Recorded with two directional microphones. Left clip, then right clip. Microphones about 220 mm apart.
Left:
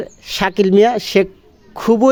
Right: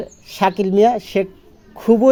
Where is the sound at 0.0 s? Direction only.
40° left (ahead or behind).